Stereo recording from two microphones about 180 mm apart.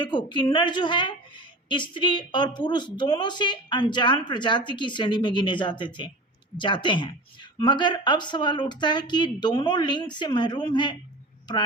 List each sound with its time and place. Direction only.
0.0 s speech: 25° left (ahead or behind)